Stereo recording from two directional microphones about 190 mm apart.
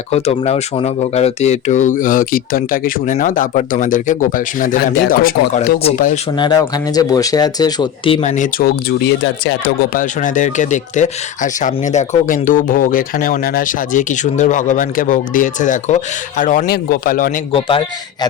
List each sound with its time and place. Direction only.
0.1 s speech: 35° left (ahead or behind); by 5.7 s 50° left (ahead or behind)
6.3 s speech: 25° left (ahead or behind); by 10.0 s 65° left (ahead or behind)
10.0 s speech: 40° left (ahead or behind)
17.5 s speech: 25° left (ahead or behind)